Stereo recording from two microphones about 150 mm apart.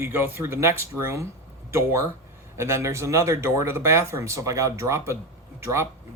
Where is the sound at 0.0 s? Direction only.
15° right (ahead or behind).